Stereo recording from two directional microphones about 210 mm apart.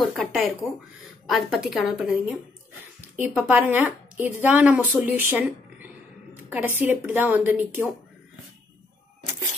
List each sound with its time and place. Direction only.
0.0 s a woman's voice: centre (ahead or behind)